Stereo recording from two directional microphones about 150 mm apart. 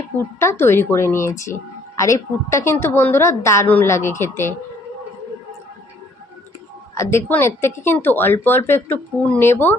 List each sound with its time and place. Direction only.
0.3 s speech: 15° left (ahead or behind)
6.9 s speech: 15° left (ahead or behind)